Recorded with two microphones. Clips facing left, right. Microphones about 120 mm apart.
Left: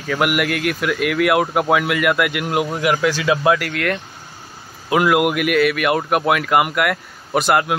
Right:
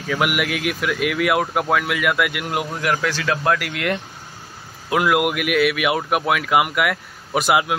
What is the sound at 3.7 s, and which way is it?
Speech, 15° right (ahead or behind).